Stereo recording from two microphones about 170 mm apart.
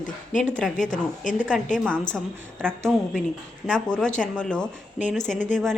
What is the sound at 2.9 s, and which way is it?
A woman's voice, 5° right (ahead or behind).